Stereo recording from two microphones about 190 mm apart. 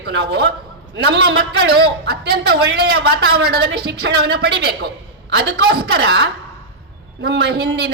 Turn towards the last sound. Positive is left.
turn(degrees=-60)  # may be behind; listen again after turning